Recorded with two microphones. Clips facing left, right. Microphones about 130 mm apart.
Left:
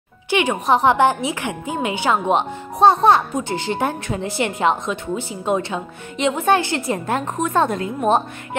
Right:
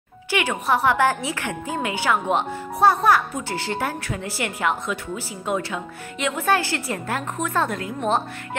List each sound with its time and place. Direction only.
0.3 s a woman's voice: 20° left (ahead or behind)